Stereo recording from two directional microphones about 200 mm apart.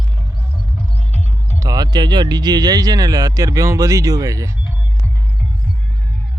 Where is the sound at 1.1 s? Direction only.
35° left (ahead or behind).